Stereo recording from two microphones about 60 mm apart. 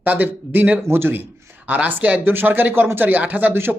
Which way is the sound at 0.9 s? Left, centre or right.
Right.